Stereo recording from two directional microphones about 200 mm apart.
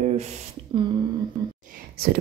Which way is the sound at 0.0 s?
35° right (ahead or behind).